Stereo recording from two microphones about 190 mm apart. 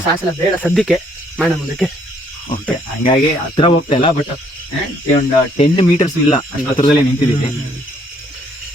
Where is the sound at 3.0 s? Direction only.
25° left (ahead or behind).